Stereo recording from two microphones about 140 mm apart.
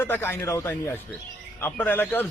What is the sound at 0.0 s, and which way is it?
A man's voice, 15° left (ahead or behind).